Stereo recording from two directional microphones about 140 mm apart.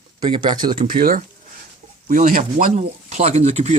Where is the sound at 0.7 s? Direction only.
65° right (ahead or behind).